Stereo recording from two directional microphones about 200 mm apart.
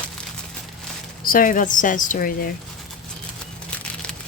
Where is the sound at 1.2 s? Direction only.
45° left (ahead or behind).